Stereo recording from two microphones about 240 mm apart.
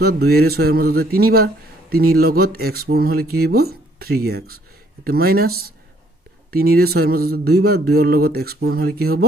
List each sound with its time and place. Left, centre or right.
0.0 s speech: right